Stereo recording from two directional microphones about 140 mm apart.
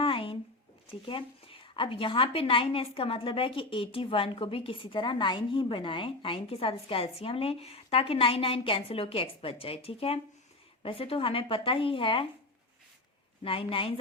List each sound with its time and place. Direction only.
0.0 s a sound: 40° left (ahead or behind)
0.9 s a woman's voice: 40° left (ahead or behind)
13.4 s a woman's voice: 40° left (ahead or behind)